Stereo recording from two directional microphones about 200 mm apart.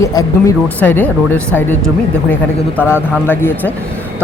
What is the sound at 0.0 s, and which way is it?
Speech, 15° left (ahead or behind).